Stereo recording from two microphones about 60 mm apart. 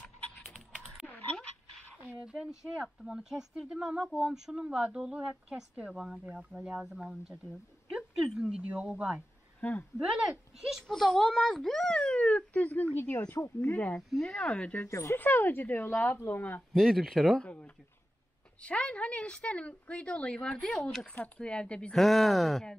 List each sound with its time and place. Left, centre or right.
0.4 s typing: centre
2.2 s speech: centre
9.6 s speech: left
9.9 s speech: centre
10.9 s a child's voice: centre; by 13.0 s left
13.3 s speech: left
14.1 s a child's voice: centre
14.9 s speech: left
15.1 s speech: left
16.7 s speech: centre
17.4 s a child's voice: left
21.9 s speech: centre